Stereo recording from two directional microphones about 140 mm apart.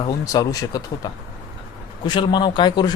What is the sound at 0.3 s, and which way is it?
Speech, 25° left (ahead or behind).